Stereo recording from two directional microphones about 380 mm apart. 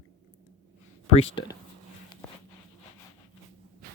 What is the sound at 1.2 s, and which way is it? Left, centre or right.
Speech, centre.